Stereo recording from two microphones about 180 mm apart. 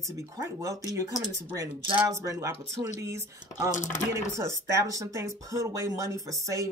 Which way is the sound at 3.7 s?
45° left (ahead or behind).